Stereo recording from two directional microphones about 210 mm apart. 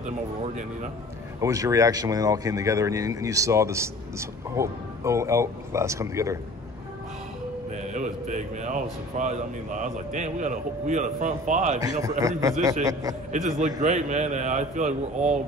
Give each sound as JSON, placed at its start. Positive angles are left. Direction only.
{"t": 1.4, "sound": "speech", "side_deg": -15}
{"t": 7.7, "sound": "a man's voice", "side_deg": -35}
{"t": 11.8, "sound": "speech", "side_deg": -20}
{"t": 13.3, "sound": "a man's voice", "side_deg": -35}